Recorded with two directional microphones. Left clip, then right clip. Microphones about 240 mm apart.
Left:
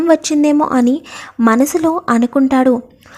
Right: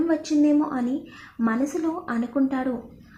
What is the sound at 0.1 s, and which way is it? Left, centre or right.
A woman's voice, left.